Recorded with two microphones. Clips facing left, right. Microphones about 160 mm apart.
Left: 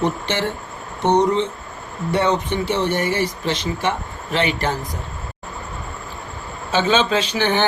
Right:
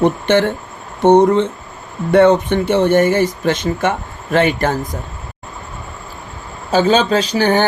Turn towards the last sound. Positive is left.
turn(degrees=-40)  # may be behind; listen again after turning